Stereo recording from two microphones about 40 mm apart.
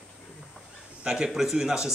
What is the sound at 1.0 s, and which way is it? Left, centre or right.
Speech, right.